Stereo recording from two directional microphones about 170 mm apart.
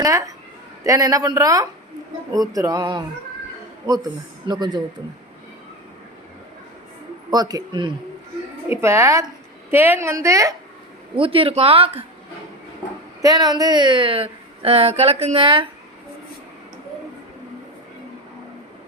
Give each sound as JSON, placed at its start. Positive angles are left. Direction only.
{"t": 0.0, "sound": "speech", "side_deg": -20}
{"t": 7.3, "sound": "speech", "side_deg": -20}
{"t": 8.7, "sound": "a woman's voice", "side_deg": -15}
{"t": 11.1, "sound": "speech", "side_deg": -30}
{"t": 13.2, "sound": "speech", "side_deg": -25}